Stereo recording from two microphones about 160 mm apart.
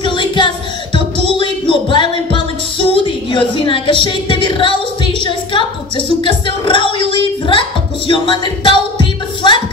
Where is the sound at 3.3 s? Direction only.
30° left (ahead or behind).